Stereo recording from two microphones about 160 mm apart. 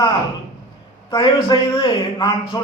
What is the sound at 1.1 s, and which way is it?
A man's voice, 30° left (ahead or behind).